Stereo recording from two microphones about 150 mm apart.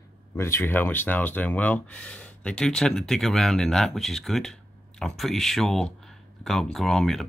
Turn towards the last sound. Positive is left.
turn(degrees=0)  # may be behind; listen again after turning